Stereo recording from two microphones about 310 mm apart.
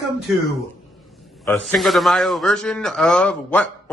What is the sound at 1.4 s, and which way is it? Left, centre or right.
A man's voice, centre.